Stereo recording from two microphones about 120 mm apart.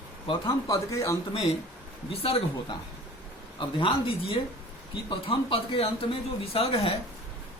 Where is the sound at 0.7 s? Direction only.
25° left (ahead or behind).